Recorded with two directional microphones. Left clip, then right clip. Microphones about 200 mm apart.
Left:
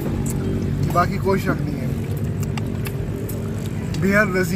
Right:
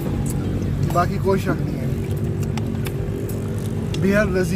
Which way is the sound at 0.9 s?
Centre (ahead or behind).